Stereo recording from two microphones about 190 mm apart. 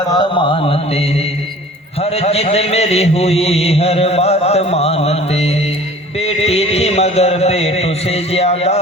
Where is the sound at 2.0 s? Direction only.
30° left (ahead or behind).